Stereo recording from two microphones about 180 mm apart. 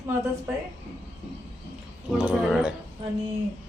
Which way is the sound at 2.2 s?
5° right (ahead or behind).